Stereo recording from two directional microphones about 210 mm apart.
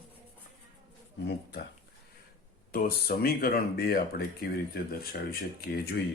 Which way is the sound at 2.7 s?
45° left (ahead or behind).